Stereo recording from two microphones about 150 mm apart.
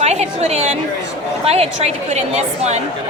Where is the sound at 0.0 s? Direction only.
45° right (ahead or behind).